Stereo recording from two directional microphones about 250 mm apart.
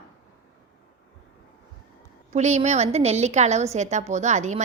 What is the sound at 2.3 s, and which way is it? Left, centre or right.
A woman's voice, right.